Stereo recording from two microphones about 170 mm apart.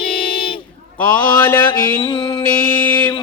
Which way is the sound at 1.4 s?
15° left (ahead or behind).